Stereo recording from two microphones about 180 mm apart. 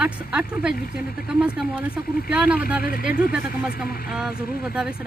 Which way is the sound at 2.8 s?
55° left (ahead or behind).